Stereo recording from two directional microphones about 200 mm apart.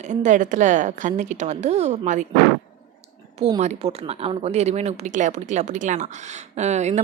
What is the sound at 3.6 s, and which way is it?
Speech, 35° right (ahead or behind).